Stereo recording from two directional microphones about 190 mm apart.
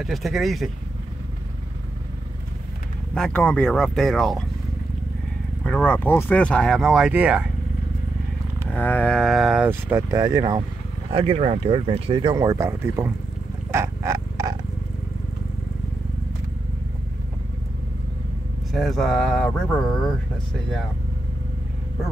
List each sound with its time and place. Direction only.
0.0 s speech: centre (ahead or behind)
3.2 s speech: 5° left (ahead or behind)
5.6 s speech: 5° left (ahead or behind)
8.7 s speech: 10° left (ahead or behind)
9.7 s speech: 15° right (ahead or behind)
11.1 s speech: 30° right (ahead or behind); by 13.1 s 15° right (ahead or behind)
13.7 s a sound: 15° right (ahead or behind)
18.7 s speech: centre (ahead or behind)